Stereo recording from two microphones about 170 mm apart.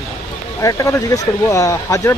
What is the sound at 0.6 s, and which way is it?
Speech, 20° left (ahead or behind).